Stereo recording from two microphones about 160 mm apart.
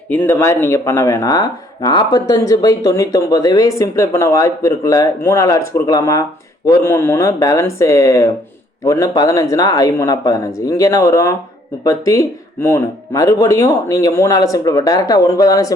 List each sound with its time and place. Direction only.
0.1 s speech: 15° left (ahead or behind)